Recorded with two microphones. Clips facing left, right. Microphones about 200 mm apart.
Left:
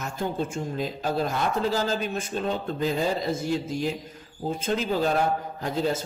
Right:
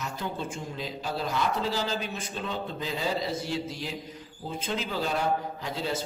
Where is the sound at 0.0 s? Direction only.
45° left (ahead or behind).